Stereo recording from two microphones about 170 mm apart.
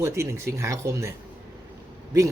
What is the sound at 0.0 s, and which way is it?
Speech, 15° right (ahead or behind).